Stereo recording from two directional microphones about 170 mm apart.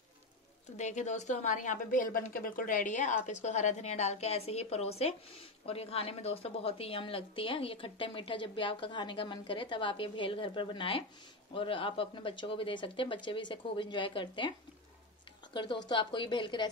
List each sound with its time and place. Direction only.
0.7 s a woman's voice: 45° left (ahead or behind); by 14.5 s 30° left (ahead or behind)
15.5 s speech: 30° left (ahead or behind)